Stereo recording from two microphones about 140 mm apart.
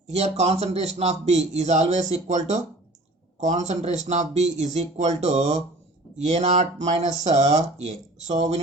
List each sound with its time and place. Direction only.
0.1 s speech: 50° right (ahead or behind)